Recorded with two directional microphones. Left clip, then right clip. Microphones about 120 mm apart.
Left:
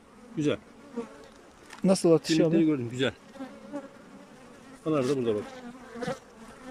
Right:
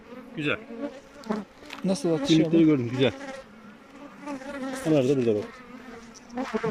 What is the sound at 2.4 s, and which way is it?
Speech, centre (ahead or behind).